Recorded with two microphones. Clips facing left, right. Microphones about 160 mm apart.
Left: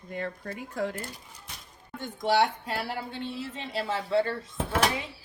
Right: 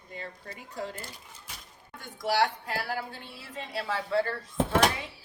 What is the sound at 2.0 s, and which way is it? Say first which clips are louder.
Speech: left 2 dB; 25° left (ahead or behind).